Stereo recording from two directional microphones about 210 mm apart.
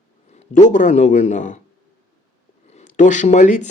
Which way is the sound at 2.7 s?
35° left (ahead or behind).